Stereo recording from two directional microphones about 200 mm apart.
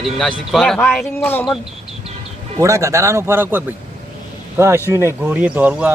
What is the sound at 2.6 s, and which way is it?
Speech, 15° right (ahead or behind).